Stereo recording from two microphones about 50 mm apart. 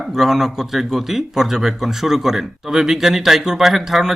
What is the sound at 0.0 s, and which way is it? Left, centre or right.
Speech, centre.